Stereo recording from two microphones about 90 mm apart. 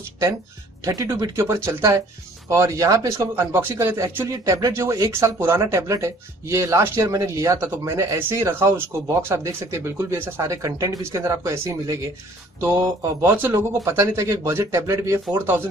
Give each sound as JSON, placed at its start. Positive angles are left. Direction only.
{"t": 0.8, "sound": "a man's voice", "side_deg": -40}